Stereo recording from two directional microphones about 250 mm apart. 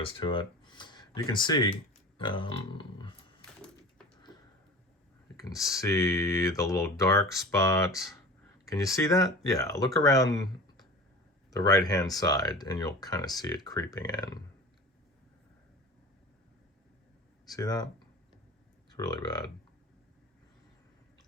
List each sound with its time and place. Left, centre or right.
0.0 s speech: centre
2.1 s a sound: centre
5.4 s speech: centre
11.5 s speech: centre
17.5 s speech: centre
18.9 s speech: centre